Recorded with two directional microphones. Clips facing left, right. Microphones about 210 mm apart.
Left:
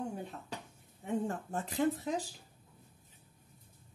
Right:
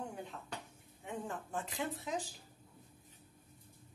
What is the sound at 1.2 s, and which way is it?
A woman's voice, 40° left (ahead or behind).